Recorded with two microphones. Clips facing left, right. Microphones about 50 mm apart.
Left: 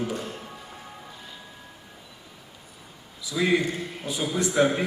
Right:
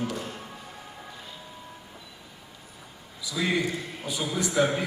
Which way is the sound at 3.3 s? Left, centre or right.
Left.